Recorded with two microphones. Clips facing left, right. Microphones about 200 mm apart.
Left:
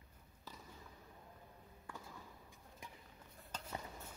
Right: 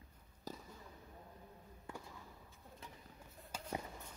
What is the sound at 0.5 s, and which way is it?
Fireworks, 40° right (ahead or behind).